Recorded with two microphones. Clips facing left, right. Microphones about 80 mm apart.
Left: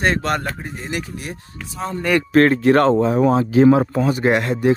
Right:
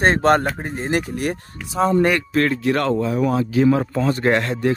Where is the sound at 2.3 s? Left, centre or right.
Left.